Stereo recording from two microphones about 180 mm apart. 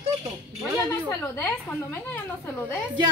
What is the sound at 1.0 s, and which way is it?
A woman's voice, 10° left (ahead or behind).